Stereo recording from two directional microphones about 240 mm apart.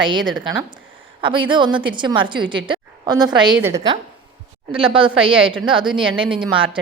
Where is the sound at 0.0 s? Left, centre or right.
Centre.